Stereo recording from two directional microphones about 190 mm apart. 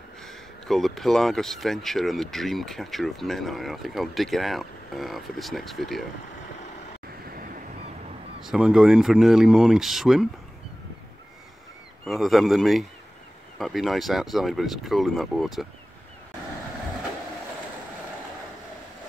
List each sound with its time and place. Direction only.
0.7 s speech: centre (ahead or behind)
7.2 s waves: 50° right (ahead or behind)
8.5 s speech: 5° right (ahead or behind)
12.0 s speech: centre (ahead or behind)